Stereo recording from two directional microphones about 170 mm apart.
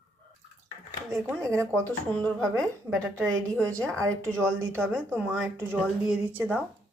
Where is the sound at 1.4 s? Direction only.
15° right (ahead or behind).